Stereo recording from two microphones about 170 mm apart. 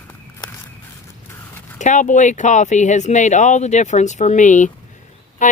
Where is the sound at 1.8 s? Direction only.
45° left (ahead or behind).